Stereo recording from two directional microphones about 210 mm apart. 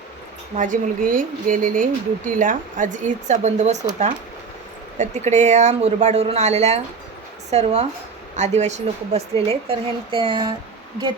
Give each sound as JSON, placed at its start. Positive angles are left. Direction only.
{"t": 0.5, "sound": "speech", "side_deg": -35}
{"t": 4.9, "sound": "a woman's voice", "side_deg": -35}